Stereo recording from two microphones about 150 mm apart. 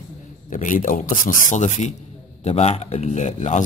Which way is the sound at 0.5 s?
60° left (ahead or behind).